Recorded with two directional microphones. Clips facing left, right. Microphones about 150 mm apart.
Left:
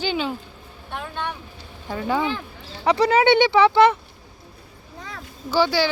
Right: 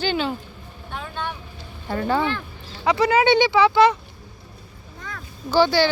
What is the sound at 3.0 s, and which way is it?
Speech, 30° left (ahead or behind).